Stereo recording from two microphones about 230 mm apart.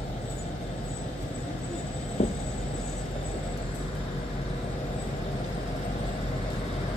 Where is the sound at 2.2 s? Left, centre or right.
Left.